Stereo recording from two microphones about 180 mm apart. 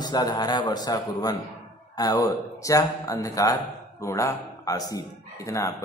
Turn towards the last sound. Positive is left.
turn(degrees=15)  # may be behind; listen again after turning